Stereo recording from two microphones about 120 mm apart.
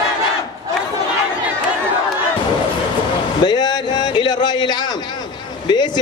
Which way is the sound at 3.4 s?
35° left (ahead or behind).